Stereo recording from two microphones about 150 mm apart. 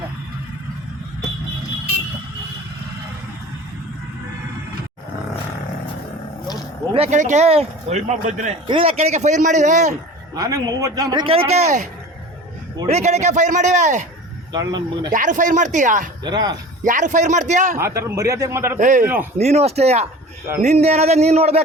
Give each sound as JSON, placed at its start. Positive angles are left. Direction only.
{"t": 6.9, "sound": "speech", "side_deg": -45}
{"t": 8.6, "sound": "speech", "side_deg": -35}
{"t": 10.3, "sound": "a man's voice", "side_deg": -25}
{"t": 12.9, "sound": "speech", "side_deg": -50}
{"t": 14.5, "sound": "a man's voice", "side_deg": -25}
{"t": 15.1, "sound": "speech", "side_deg": -60}
{"t": 16.2, "sound": "a man's voice", "side_deg": -30}
{"t": 16.8, "sound": "speech", "side_deg": -60}
{"t": 17.7, "sound": "a man's voice", "side_deg": -20}
{"t": 18.8, "sound": "speech", "side_deg": -60}
{"t": 19.0, "sound": "speech", "side_deg": -15}
{"t": 19.4, "sound": "speech", "side_deg": -45}